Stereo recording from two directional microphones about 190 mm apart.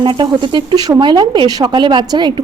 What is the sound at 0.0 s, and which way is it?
Speech, 25° right (ahead or behind).